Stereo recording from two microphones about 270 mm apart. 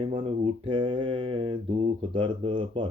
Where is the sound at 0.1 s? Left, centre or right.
Centre.